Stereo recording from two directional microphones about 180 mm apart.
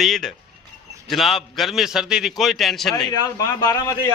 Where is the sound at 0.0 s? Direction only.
Centre (ahead or behind).